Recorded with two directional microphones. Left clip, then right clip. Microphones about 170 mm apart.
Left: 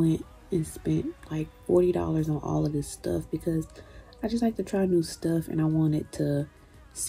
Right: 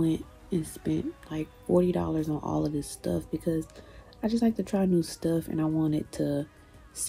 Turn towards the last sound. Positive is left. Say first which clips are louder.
# left 1 dB
turn(degrees=-20)  # may be behind; listen again after turning